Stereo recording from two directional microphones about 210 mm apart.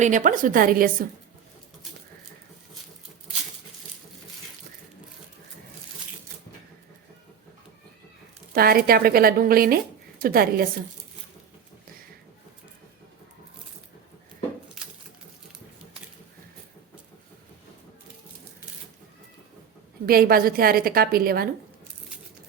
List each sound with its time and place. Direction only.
0.0 s a woman's voice: 35° right (ahead or behind)
8.5 s a woman's voice: 45° right (ahead or behind)
20.1 s a woman's voice: 45° right (ahead or behind)